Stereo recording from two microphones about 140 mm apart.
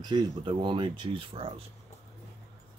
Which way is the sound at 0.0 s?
30° right (ahead or behind).